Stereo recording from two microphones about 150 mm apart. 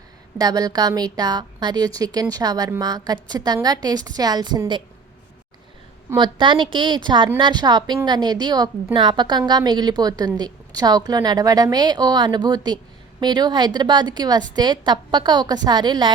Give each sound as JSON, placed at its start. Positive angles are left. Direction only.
{"t": 0.3, "sound": "a woman's voice", "side_deg": -25}
{"t": 6.1, "sound": "a woman's voice", "side_deg": -30}